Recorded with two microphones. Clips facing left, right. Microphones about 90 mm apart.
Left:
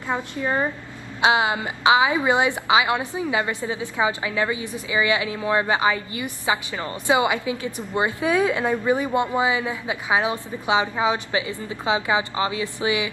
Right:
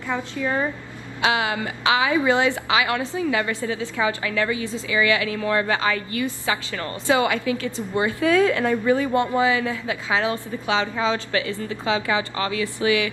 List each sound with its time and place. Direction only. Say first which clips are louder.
0.1 s a woman's voice: even; 20° left (ahead or behind)